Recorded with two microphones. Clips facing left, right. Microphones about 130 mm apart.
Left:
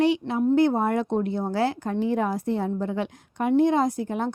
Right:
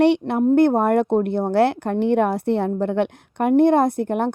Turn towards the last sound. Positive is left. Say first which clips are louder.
# right 5 dB
turn(degrees=-60)  # may be behind; listen again after turning